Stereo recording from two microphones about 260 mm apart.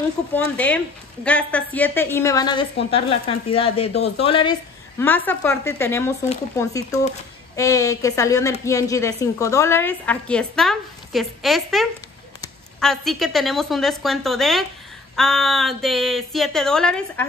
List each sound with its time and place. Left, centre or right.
0.3 s a woman's voice: centre